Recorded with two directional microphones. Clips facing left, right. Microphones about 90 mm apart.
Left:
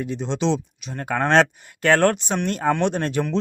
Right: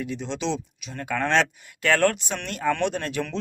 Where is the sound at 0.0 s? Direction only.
30° left (ahead or behind).